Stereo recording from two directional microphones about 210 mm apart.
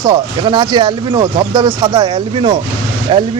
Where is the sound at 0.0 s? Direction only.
20° right (ahead or behind).